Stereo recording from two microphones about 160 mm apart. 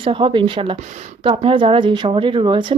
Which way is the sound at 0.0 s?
30° right (ahead or behind).